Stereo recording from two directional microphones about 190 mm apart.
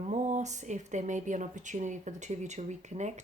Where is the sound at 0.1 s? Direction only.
35° right (ahead or behind).